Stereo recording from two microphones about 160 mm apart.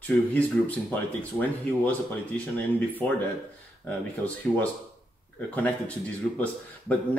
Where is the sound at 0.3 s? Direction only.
10° left (ahead or behind).